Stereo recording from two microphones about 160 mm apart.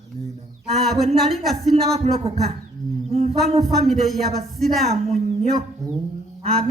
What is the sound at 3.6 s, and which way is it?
Speech, centre (ahead or behind).